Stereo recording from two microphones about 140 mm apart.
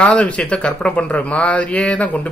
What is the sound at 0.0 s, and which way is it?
A man's voice, 10° left (ahead or behind).